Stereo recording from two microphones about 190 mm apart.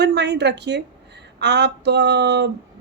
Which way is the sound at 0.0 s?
60° right (ahead or behind).